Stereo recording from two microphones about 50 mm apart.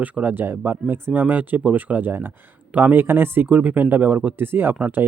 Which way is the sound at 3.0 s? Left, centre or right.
Right.